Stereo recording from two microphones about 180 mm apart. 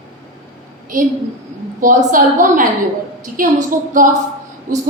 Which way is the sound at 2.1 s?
50° right (ahead or behind).